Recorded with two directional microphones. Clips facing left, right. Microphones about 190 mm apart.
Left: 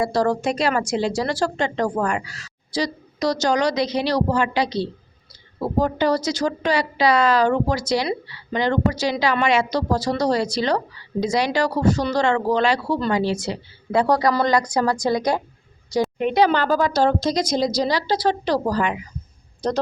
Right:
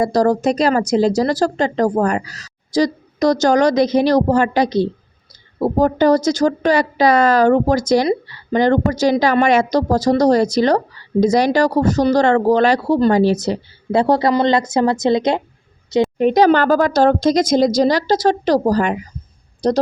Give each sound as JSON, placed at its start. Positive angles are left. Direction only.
{"t": 0.0, "sound": "speech", "side_deg": -40}
{"t": 13.9, "sound": "a woman's voice", "side_deg": -25}
{"t": 16.1, "sound": "speech", "side_deg": -40}